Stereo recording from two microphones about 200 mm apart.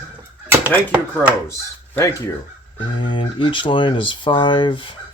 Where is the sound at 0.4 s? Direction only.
10° right (ahead or behind).